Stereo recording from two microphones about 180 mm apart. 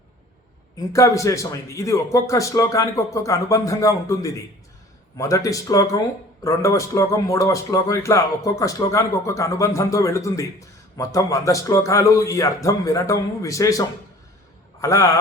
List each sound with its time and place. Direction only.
0.8 s a man's voice: 15° left (ahead or behind)